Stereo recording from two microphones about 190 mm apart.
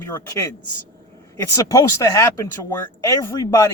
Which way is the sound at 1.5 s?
15° left (ahead or behind).